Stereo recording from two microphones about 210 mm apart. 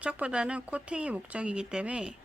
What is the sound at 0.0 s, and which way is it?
Speech, 5° right (ahead or behind).